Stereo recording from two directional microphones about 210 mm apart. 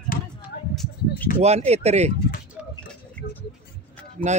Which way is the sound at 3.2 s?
45° left (ahead or behind).